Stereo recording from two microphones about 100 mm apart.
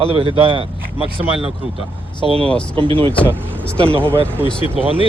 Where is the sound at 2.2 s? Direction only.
70° right (ahead or behind).